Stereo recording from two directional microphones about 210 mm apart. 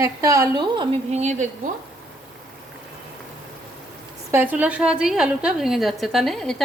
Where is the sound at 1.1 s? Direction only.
35° right (ahead or behind).